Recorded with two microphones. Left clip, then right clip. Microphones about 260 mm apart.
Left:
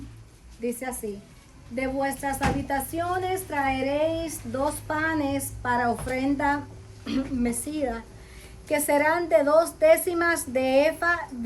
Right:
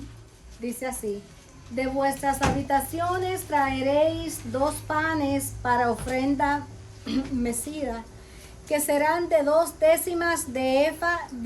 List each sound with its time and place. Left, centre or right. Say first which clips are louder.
0.6 s a woman's voice: even; centre